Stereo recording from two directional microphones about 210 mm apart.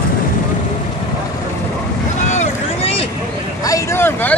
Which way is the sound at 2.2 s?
30° left (ahead or behind).